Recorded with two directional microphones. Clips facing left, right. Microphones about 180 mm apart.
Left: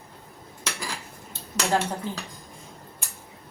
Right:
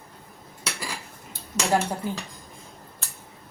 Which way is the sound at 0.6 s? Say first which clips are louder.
Even; 5° right (ahead or behind).